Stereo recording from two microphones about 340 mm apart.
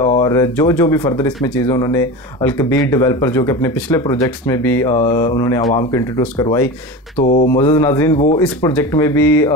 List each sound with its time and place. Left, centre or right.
0.0 s speech: centre
7.2 s speech: left